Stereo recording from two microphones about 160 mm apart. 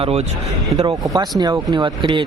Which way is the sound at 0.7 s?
25° right (ahead or behind).